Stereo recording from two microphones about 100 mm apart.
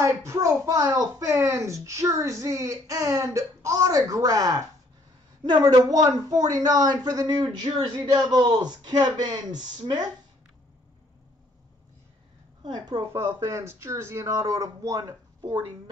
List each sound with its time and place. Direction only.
0.0 s a man's voice: 30° right (ahead or behind)
12.6 s a man's voice: 45° right (ahead or behind)
13.1 s speech: 25° right (ahead or behind)